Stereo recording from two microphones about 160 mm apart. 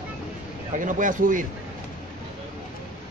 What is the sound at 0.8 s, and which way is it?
Speech, 55° right (ahead or behind).